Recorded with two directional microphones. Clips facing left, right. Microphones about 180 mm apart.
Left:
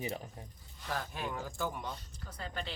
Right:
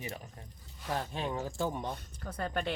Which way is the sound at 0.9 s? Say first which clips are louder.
Right 4 dB; 25° right (ahead or behind).